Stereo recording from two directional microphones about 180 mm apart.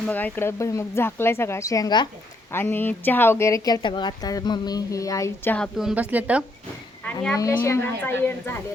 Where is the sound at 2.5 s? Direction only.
10° left (ahead or behind).